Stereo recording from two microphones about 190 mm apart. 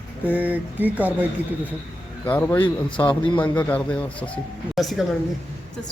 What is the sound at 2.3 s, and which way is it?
Speech, 10° left (ahead or behind).